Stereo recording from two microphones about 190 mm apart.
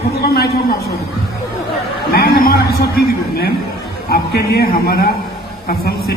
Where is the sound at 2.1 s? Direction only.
55° left (ahead or behind).